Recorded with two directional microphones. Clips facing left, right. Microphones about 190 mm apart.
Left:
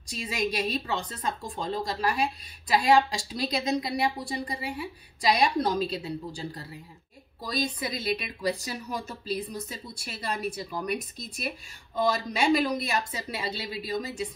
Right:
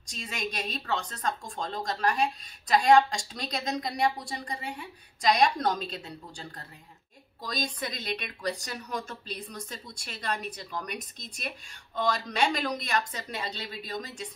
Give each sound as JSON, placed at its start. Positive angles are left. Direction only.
{"t": 0.1, "sound": "a woman's voice", "side_deg": 5}
{"t": 7.4, "sound": "speech", "side_deg": 5}